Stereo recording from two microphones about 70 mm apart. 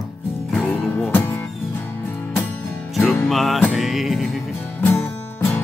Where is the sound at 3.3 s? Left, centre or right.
Centre.